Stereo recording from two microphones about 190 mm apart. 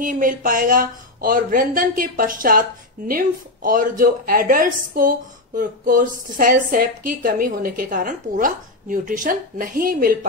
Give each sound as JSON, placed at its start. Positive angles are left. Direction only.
{"t": 0.0, "sound": "speech", "side_deg": -45}